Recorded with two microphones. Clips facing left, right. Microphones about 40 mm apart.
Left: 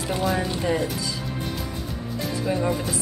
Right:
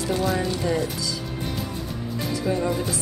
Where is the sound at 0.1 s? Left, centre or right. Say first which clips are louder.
Even; centre.